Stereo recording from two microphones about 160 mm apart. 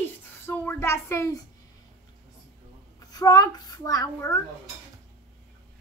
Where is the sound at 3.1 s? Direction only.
25° left (ahead or behind).